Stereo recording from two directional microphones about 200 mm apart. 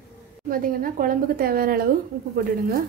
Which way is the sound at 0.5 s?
45° right (ahead or behind).